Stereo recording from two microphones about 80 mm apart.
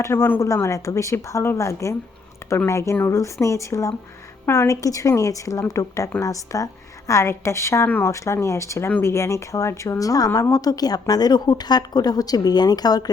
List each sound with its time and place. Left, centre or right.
0.0 s a woman's voice: left